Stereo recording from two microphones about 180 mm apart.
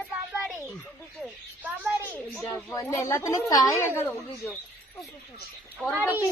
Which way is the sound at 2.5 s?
15° left (ahead or behind).